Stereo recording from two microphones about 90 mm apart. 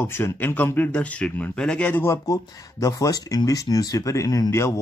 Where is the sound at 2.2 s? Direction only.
40° left (ahead or behind).